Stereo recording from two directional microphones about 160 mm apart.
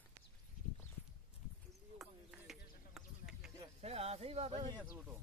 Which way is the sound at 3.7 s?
40° right (ahead or behind).